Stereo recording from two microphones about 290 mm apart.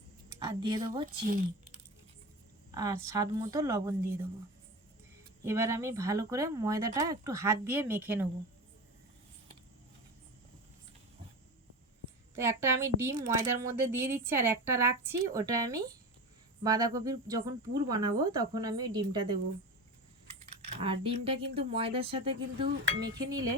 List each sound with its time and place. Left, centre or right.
0.3 s a woman's voice: centre
1.0 s speech: right
2.7 s a woman's voice: centre
5.5 s a woman's voice: centre
12.4 s a woman's voice: centre
20.8 s speech: centre